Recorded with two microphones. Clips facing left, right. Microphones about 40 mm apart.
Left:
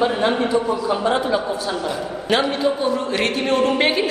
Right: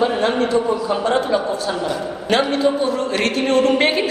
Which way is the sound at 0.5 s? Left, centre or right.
Centre.